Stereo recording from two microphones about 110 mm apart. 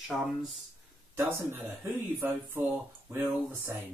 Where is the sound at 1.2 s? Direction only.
20° right (ahead or behind).